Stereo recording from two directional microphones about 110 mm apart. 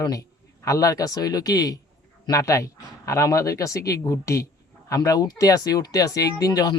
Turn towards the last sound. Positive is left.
turn(degrees=35)  # may be behind; listen again after turning